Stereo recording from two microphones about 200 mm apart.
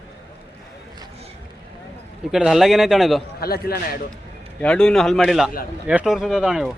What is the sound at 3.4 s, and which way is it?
Speech, 50° left (ahead or behind).